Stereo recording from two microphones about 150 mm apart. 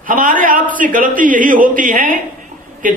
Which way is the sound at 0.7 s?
60° right (ahead or behind).